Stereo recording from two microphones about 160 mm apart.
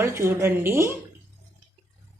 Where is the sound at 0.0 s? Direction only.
15° right (ahead or behind).